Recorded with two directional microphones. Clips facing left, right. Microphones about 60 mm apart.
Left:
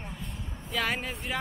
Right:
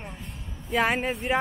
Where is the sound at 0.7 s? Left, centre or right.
Right.